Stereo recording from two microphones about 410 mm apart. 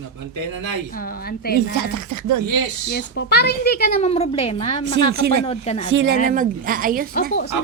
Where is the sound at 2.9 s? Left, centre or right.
Left.